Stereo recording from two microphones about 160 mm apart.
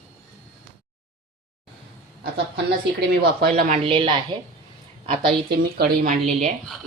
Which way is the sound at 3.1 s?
75° right (ahead or behind).